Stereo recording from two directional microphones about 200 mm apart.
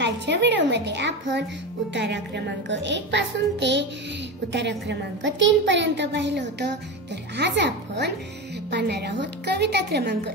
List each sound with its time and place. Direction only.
0.0 s a woman's voice: 60° right (ahead or behind)